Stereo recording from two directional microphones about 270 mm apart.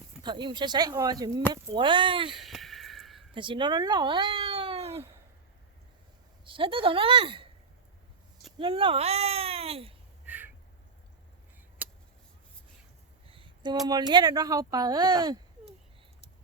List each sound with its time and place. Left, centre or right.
0.2 s speech: centre
2.4 s a sound: centre
3.3 s speech: centre
6.4 s a woman's voice: centre
8.5 s speech: centre
10.2 s crow: centre
11.8 s a sound: centre
13.2 s a sound: centre
13.8 s speech: centre